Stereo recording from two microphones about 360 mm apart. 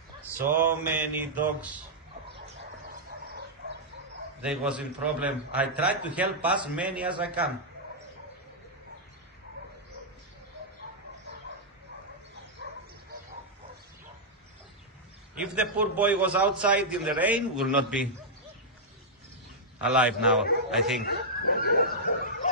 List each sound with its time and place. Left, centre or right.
0.6 s a man's voice: centre
4.4 s a man's voice: centre
15.3 s a man's voice: centre
19.8 s a man's voice: centre
21.0 s speech: left